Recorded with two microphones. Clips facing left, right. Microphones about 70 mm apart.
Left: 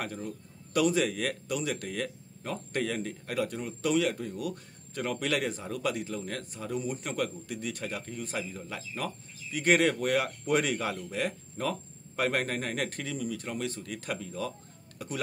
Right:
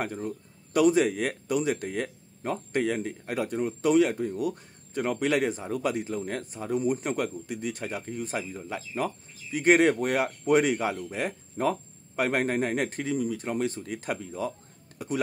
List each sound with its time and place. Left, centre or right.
0.0 s speech: right